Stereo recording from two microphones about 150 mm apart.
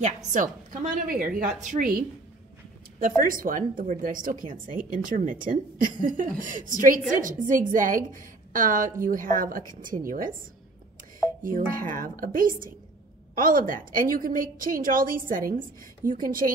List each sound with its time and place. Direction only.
0.0 s a woman's voice: 55° right (ahead or behind); by 2.0 s 70° right (ahead or behind)
3.2 s speech: 65° right (ahead or behind)
11.4 s a woman's voice: 65° right (ahead or behind)